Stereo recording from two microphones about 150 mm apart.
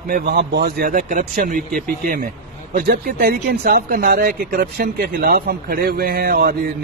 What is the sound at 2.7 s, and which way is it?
Speech, 75° right (ahead or behind).